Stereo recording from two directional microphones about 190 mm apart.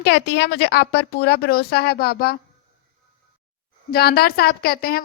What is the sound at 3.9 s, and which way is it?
A woman's voice, 55° left (ahead or behind).